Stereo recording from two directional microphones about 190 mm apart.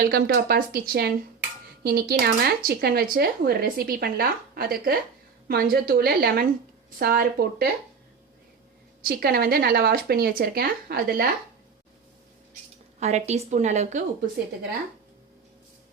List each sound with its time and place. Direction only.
0.0 s speech: 50° right (ahead or behind)
9.0 s speech: 50° right (ahead or behind)
13.0 s a woman's voice: 35° right (ahead or behind)